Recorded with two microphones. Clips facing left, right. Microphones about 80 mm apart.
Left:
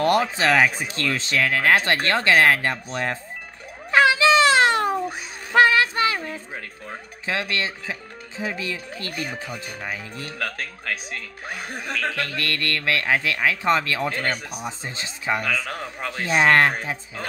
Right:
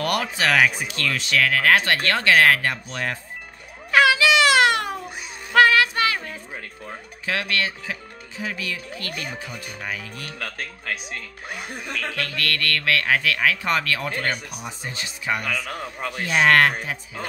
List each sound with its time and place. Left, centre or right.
0.0 s speech: left
3.9 s a sound: left
5.5 s speech: left
12.1 s speech: left